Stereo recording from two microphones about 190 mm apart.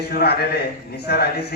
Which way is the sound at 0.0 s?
55° left (ahead or behind).